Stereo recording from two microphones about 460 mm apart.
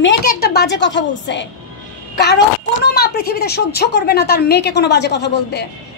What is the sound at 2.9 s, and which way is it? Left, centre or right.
A woman's voice, centre.